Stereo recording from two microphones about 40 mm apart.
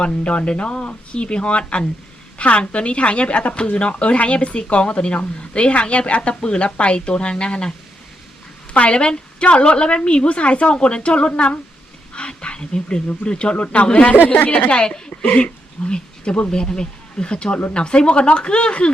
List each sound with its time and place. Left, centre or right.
0.0 s a woman's voice: left
8.7 s a woman's voice: left
14.7 s a woman's voice: left